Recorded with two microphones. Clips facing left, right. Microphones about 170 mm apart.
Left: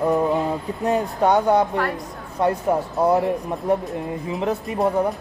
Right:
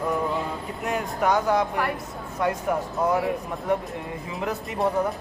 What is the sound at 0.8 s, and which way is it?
Speech, 30° left (ahead or behind).